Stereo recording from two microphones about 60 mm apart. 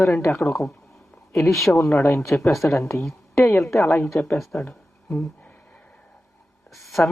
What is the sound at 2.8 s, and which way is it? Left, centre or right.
Speech, left.